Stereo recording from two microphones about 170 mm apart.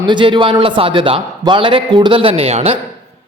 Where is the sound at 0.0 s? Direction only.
25° right (ahead or behind).